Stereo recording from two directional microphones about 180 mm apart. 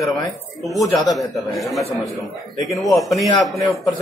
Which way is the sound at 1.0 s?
Centre (ahead or behind).